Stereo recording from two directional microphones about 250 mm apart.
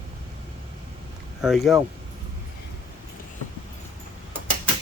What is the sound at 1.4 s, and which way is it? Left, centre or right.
Speech, centre.